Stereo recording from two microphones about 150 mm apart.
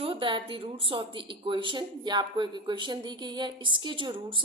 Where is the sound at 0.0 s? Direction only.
35° right (ahead or behind).